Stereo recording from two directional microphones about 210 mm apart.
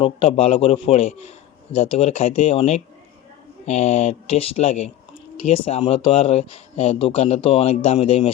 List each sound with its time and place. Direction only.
0.0 s speech: 25° left (ahead or behind)